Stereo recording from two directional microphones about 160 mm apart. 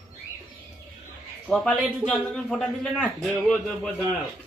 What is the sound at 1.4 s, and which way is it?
A man's voice, 5° left (ahead or behind).